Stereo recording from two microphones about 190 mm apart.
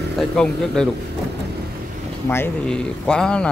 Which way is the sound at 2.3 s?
10° left (ahead or behind).